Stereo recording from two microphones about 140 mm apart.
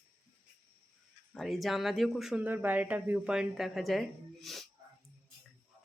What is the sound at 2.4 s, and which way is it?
Speech, 15° right (ahead or behind).